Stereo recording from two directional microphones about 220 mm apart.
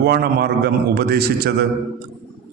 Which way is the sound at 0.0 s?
45° right (ahead or behind).